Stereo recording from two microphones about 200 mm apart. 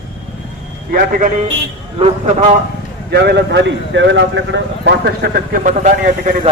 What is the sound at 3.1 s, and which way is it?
Speech, 55° right (ahead or behind).